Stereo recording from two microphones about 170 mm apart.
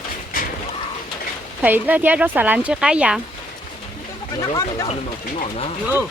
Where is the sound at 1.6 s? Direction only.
10° right (ahead or behind).